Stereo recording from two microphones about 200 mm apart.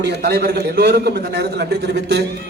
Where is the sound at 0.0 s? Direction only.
55° right (ahead or behind).